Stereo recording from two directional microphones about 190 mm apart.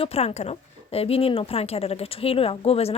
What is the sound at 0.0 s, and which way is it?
A woman's voice, 30° left (ahead or behind).